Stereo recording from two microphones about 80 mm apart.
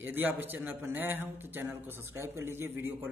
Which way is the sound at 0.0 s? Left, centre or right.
Right.